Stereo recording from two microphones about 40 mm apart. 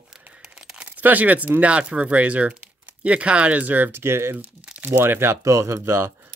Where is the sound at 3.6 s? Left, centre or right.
Right.